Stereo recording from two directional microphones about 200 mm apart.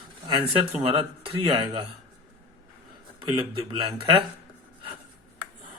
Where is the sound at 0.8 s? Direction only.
30° right (ahead or behind).